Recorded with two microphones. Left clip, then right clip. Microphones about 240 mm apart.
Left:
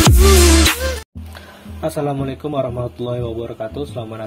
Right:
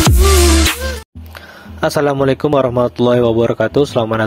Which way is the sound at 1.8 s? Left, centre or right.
Right.